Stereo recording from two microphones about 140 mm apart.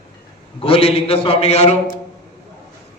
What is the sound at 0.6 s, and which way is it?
A man's voice, 45° left (ahead or behind).